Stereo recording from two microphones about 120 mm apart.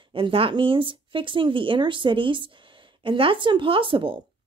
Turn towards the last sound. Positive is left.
turn(degrees=-45)  # may be behind; listen again after turning